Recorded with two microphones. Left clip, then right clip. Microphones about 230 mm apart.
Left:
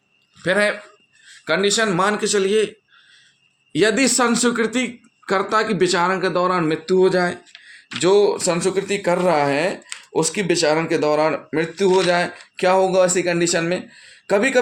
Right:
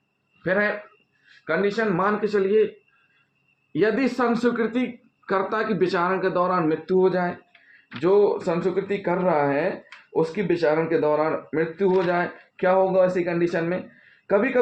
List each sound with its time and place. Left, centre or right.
0.4 s speech: left
3.7 s speech: left